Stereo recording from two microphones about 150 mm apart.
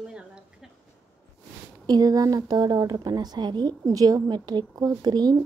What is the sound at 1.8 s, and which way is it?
A woman's voice, 25° right (ahead or behind).